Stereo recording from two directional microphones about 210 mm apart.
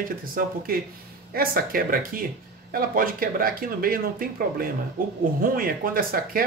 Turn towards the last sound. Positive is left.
turn(degrees=-45)  # may be behind; listen again after turning